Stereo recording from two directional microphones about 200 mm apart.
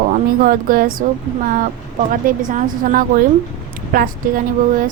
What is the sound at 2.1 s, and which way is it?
Speech, 40° right (ahead or behind).